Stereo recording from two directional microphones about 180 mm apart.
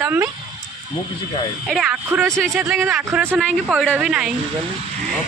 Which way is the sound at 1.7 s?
5° right (ahead or behind).